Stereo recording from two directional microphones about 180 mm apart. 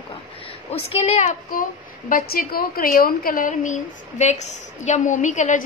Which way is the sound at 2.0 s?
55° left (ahead or behind).